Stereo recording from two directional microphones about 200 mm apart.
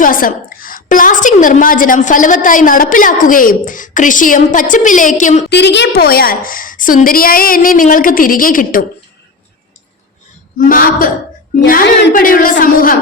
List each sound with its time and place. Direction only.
0.0 s a woman's voice: 45° left (ahead or behind)
5.5 s a woman's voice: 60° left (ahead or behind)
10.7 s a woman's voice: 45° left (ahead or behind)